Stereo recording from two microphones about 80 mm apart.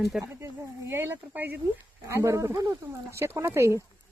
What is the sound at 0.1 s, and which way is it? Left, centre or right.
Speech, centre.